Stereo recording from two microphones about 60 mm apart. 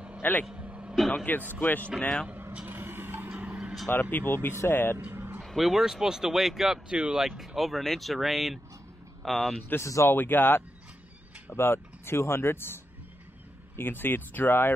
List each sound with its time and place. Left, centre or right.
0.2 s speech: left
0.6 s a sound: right
1.1 s speech: left
2.6 s vehicle: right
3.3 s vehicle: right
3.9 s speech: left
5.1 s a sound: right
5.4 s speech: centre
6.9 s speech: centre
9.8 s speech: left
10.0 s speech: left
13.7 s speech: left